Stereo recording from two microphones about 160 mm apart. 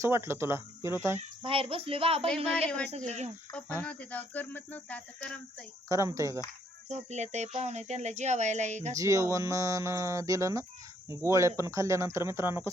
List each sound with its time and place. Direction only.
0.0 s speech: 15° right (ahead or behind)
1.4 s speech: 35° right (ahead or behind)
2.2 s speech: 5° left (ahead or behind)
5.9 s speech: 20° right (ahead or behind)
6.8 s speech: 45° right (ahead or behind)
9.0 s speech: 20° right (ahead or behind)